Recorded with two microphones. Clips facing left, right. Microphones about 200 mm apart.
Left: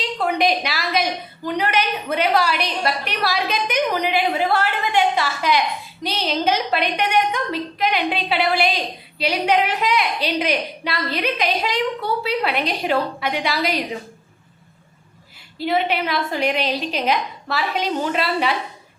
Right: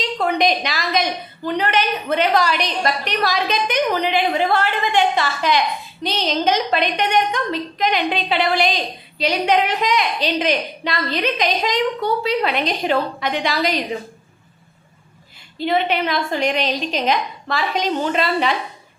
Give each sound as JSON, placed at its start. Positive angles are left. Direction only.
{"t": 0.2, "sound": "a woman's voice", "side_deg": 5}
{"t": 15.5, "sound": "a woman's voice", "side_deg": 5}